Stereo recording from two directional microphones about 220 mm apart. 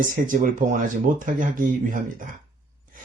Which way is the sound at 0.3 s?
35° right (ahead or behind).